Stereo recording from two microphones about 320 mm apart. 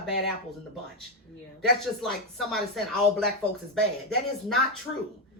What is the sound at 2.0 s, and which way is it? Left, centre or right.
Speech, centre.